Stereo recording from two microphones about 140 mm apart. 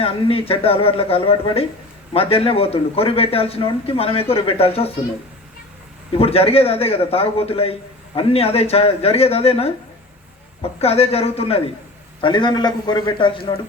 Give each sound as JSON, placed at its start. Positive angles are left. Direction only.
{"t": 0.0, "sound": "a man's voice", "side_deg": 40}
{"t": 6.1, "sound": "a man's voice", "side_deg": 45}
{"t": 12.2, "sound": "a man's voice", "side_deg": 35}